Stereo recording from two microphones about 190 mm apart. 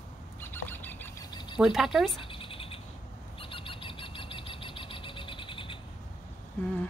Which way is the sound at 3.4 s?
25° left (ahead or behind).